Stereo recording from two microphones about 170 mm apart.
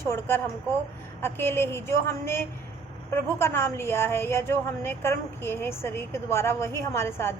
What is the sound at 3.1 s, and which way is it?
A woman's voice, 15° left (ahead or behind).